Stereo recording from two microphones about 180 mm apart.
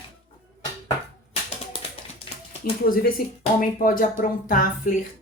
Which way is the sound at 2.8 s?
55° left (ahead or behind).